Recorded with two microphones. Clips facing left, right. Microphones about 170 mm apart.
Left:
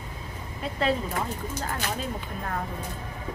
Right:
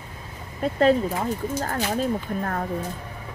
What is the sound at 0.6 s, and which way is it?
Speech, 45° right (ahead or behind).